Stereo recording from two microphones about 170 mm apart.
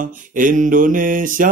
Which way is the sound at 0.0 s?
50° right (ahead or behind).